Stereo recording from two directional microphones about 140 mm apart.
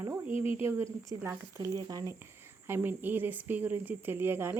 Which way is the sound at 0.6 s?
20° right (ahead or behind).